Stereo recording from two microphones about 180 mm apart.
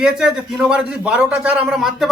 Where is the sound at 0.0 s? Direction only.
5° right (ahead or behind).